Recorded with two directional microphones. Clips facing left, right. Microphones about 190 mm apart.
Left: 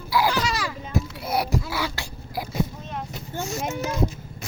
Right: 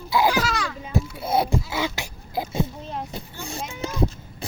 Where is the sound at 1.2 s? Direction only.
25° right (ahead or behind).